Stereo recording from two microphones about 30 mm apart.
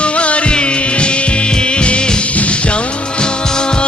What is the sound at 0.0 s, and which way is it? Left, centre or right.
Music, left.